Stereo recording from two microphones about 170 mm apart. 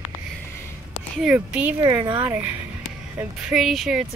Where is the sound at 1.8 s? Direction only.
15° right (ahead or behind).